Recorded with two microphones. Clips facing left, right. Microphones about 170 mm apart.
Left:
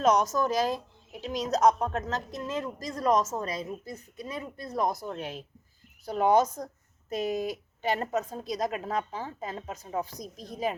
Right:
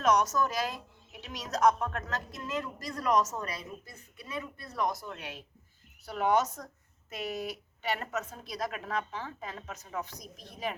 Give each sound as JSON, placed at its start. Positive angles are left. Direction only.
{"t": 0.0, "sound": "a woman's voice", "side_deg": 30}
{"t": 7.8, "sound": "speech", "side_deg": 40}
{"t": 8.5, "sound": "a woman's voice", "side_deg": 20}
{"t": 8.8, "sound": "speech", "side_deg": 35}